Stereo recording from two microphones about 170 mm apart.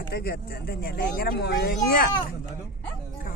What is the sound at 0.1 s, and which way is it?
Speech, 70° left (ahead or behind).